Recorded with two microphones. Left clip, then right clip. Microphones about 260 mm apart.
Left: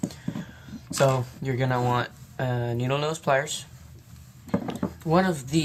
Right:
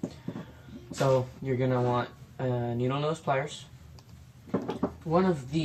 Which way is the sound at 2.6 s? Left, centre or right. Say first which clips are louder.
Left 4 dB; left.